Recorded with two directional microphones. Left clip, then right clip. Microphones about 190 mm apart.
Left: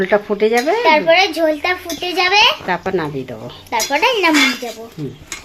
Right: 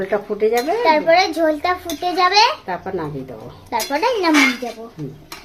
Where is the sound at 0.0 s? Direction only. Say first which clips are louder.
Left 4 dB; 35° left (ahead or behind).